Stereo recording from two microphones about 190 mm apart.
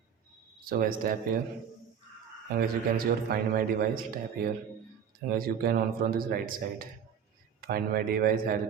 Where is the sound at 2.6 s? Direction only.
50° right (ahead or behind).